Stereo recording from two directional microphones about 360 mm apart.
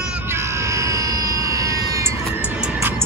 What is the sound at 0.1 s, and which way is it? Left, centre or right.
Vehicle, centre.